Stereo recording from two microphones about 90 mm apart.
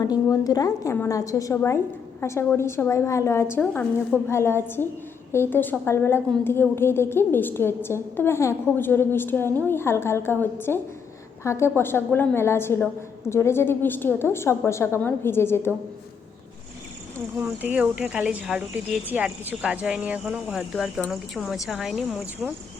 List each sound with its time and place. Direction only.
0.0 s a woman's voice: 40° left (ahead or behind)
17.6 s a woman's voice: 15° right (ahead or behind)